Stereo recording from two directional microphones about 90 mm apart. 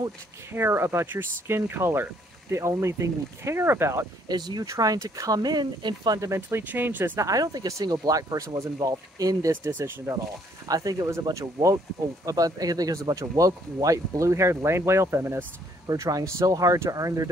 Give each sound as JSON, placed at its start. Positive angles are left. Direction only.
{"t": 0.5, "sound": "speech", "side_deg": -25}
{"t": 4.3, "sound": "speech", "side_deg": -50}
{"t": 6.7, "sound": "speech", "side_deg": -20}
{"t": 7.2, "sound": "speech", "side_deg": -40}
{"t": 9.5, "sound": "speech", "side_deg": -25}
{"t": 10.7, "sound": "speech", "side_deg": -40}
{"t": 15.9, "sound": "speech", "side_deg": -40}